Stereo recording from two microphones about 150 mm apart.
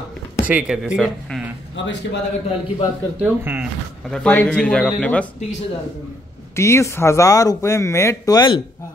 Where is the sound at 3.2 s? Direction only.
10° right (ahead or behind).